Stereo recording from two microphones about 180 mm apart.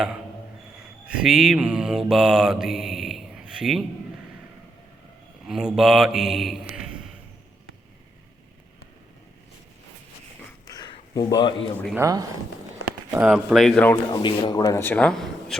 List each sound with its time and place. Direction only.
1.1 s mantra: centre (ahead or behind)
5.5 s a man's voice: centre (ahead or behind)
10.7 s a sound: 20° left (ahead or behind)
11.9 s speech: 20° right (ahead or behind)
13.1 s speech: 5° right (ahead or behind)
14.1 s speech: 25° left (ahead or behind); by 15.5 s centre (ahead or behind)